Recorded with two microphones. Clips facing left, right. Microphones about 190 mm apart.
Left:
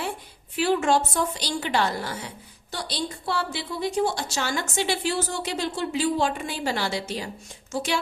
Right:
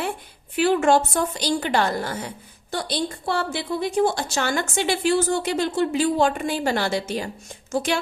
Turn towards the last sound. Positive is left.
turn(degrees=-50)  # may be behind; listen again after turning